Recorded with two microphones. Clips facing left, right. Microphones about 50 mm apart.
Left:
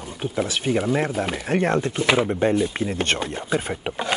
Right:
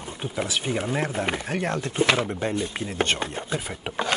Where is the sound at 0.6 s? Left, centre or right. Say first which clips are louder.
Left 7 dB; centre.